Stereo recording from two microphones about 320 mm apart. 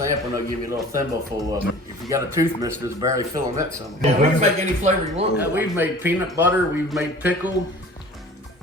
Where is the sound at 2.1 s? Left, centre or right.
Centre.